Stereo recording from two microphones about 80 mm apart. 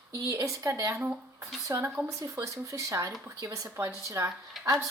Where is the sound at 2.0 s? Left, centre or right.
Right.